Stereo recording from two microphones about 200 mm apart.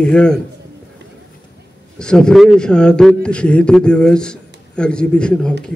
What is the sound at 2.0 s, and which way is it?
A man's voice, 5° left (ahead or behind).